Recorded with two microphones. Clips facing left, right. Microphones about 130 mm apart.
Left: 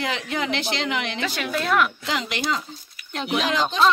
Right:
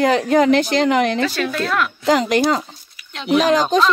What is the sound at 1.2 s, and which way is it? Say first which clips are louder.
Speech: right 6 dB; 10° left (ahead or behind).